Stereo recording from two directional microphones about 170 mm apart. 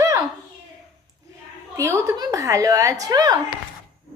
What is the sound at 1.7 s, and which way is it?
A woman's voice, 15° right (ahead or behind).